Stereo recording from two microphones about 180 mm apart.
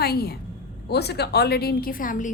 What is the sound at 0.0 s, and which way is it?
A woman's voice, 60° left (ahead or behind).